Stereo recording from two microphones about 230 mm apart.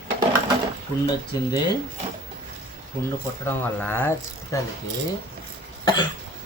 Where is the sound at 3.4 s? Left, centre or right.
Centre.